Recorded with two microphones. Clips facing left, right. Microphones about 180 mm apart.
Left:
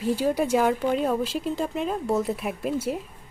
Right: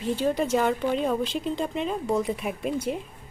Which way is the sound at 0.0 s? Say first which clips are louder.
Left 1 dB; 5° left (ahead or behind).